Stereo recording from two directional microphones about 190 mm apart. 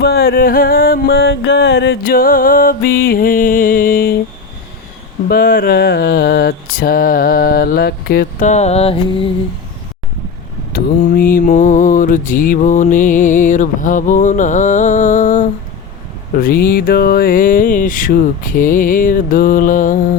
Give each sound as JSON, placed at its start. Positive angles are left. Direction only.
{"t": 0.0, "sound": "music", "side_deg": 55}
{"t": 5.3, "sound": "music", "side_deg": 50}
{"t": 10.7, "sound": "mantra", "side_deg": 50}
{"t": 16.3, "sound": "music", "side_deg": 50}